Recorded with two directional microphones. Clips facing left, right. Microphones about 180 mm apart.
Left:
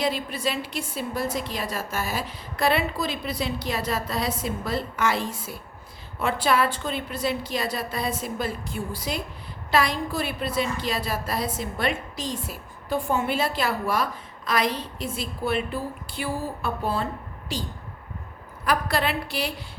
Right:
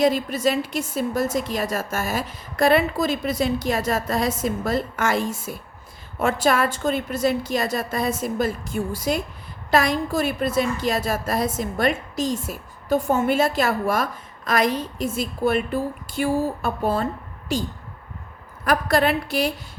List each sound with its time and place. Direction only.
0.0 s a woman's voice: 45° right (ahead or behind)